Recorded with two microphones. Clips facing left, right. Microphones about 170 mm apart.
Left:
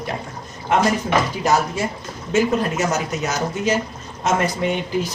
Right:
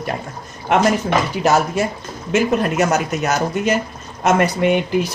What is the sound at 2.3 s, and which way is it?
Speech, 60° right (ahead or behind).